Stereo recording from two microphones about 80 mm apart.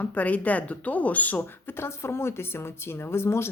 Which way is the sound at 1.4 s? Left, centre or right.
Left.